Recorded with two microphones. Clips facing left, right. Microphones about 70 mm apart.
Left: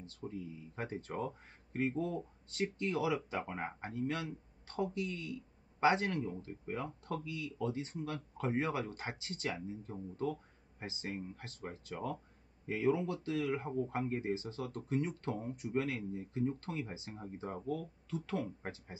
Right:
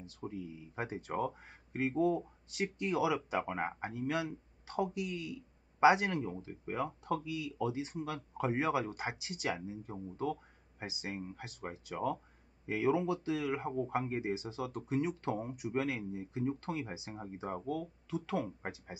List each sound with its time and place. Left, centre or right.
0.2 s speech: right